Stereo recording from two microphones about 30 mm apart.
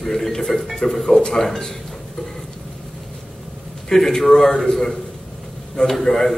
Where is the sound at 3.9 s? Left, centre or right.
Centre.